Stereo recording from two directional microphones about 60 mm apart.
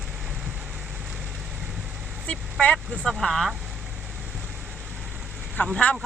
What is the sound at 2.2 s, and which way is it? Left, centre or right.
Speech, left.